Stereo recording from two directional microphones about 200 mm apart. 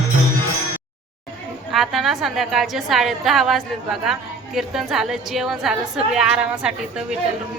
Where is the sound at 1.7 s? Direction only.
Centre (ahead or behind).